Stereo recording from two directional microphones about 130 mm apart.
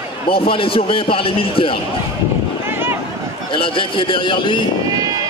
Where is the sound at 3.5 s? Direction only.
40° left (ahead or behind).